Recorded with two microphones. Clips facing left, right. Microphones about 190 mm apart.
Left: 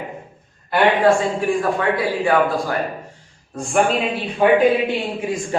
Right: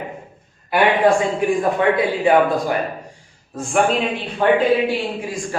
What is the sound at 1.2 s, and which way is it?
A man's voice, 20° right (ahead or behind).